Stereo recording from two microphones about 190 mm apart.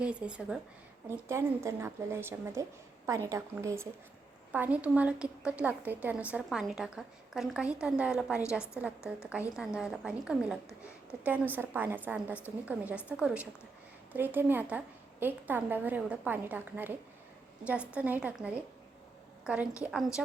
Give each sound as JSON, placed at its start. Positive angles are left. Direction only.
{"t": 0.0, "sound": "a woman's voice", "side_deg": -5}